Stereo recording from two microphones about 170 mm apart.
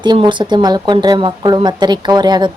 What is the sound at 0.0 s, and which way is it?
A woman's voice, 25° right (ahead or behind).